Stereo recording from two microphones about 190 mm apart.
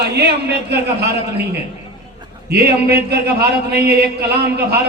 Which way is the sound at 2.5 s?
60° right (ahead or behind).